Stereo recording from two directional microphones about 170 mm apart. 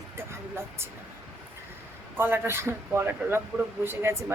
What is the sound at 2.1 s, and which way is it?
A woman's voice, 15° right (ahead or behind).